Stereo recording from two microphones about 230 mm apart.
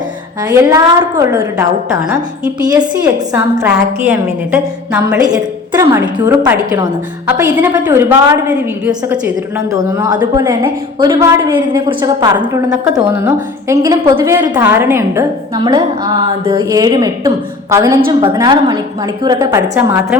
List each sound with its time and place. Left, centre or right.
0.4 s a woman's voice: centre